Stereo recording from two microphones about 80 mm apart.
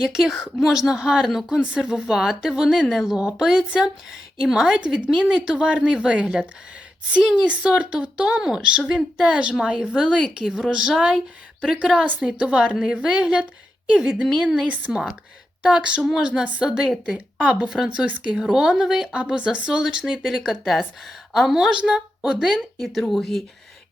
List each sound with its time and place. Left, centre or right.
0.0 s speech: centre
23.0 s speech: centre